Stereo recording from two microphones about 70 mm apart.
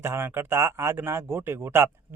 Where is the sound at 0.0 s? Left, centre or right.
Right.